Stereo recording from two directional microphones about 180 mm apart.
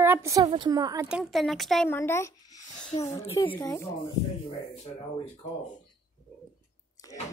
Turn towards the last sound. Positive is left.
turn(degrees=20)  # may be behind; listen again after turning